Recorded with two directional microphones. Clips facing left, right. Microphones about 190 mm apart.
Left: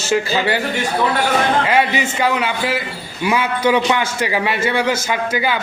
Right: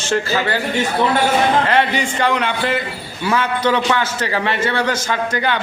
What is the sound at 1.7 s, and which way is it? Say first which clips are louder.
A man's voice: even; 10° left (ahead or behind).